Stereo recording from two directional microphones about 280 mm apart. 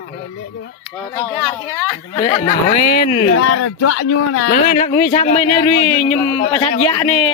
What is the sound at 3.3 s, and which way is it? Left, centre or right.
Speech, left.